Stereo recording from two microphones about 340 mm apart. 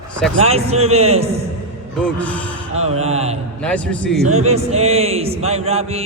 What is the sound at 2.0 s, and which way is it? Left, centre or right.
Speech, centre.